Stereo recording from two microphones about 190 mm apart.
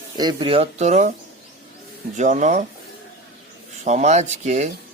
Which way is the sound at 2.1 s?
40° right (ahead or behind).